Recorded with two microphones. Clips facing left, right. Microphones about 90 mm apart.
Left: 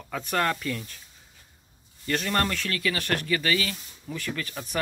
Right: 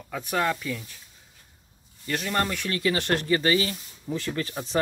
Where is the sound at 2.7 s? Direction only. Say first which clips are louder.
Right 3 dB; 25° right (ahead or behind).